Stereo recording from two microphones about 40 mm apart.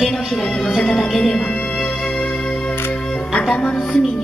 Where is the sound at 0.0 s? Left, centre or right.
Centre.